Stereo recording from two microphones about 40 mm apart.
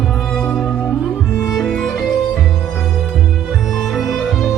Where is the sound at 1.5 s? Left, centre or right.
Centre.